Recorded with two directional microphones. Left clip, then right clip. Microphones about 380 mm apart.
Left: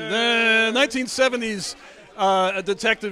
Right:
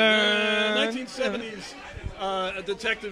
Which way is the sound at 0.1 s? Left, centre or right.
Left.